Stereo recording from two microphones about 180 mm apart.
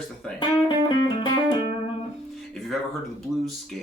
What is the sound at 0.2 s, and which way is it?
Speech, 5° left (ahead or behind).